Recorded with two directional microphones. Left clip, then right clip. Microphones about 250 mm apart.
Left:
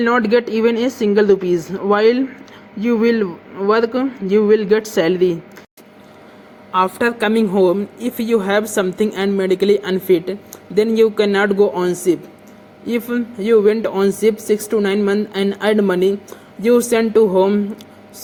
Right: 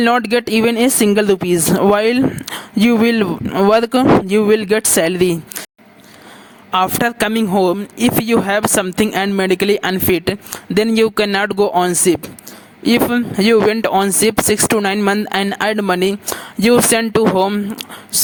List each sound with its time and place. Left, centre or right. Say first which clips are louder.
0.0 s speech: right 1 dB; right
6.7 s speech: right 1 dB; right